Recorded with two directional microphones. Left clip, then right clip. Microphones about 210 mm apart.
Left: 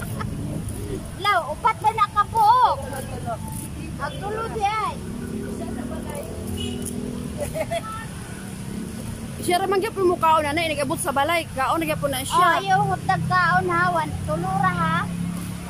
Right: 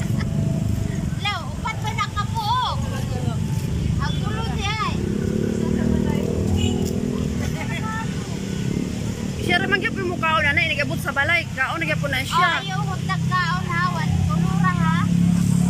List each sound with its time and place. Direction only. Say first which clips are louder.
1.2 s vehicle: left 7 dB; 55° left (ahead or behind)
4.6 s vehicle: left 3 dB; 55° left (ahead or behind)
9.5 s speech: right 1 dB; 20° left (ahead or behind)
12.6 s speech: left 7 dB; 50° left (ahead or behind)